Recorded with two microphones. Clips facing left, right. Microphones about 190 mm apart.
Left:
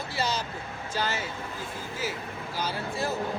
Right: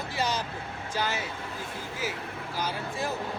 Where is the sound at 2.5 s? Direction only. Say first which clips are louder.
Left 1 dB; 15° right (ahead or behind).